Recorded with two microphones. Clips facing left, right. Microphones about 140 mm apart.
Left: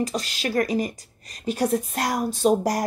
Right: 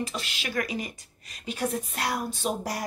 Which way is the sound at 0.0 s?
40° left (ahead or behind).